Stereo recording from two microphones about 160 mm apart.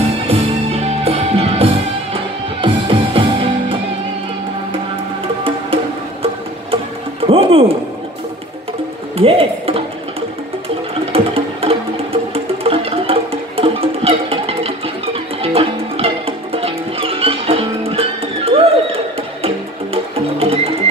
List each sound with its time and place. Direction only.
0.3 s music: 40° right (ahead or behind)
7.2 s music: 35° right (ahead or behind)
9.1 s a sound: 35° right (ahead or behind)
11.1 s music: 35° right (ahead or behind)